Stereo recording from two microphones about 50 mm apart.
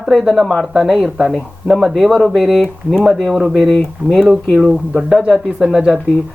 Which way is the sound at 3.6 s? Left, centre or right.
Centre.